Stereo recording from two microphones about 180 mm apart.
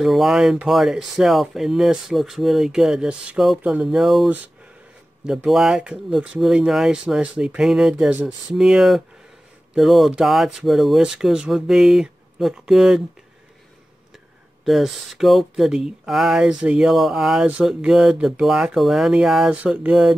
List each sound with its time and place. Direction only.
0.0 s speech: centre (ahead or behind)
14.6 s speech: centre (ahead or behind)